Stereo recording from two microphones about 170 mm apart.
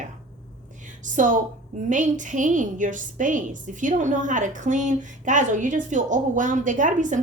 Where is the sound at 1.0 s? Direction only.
50° right (ahead or behind).